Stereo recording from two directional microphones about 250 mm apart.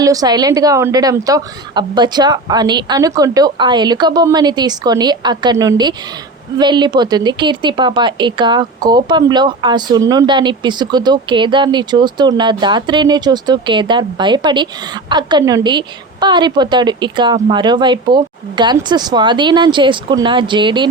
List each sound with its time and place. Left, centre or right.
0.0 s a woman's voice: centre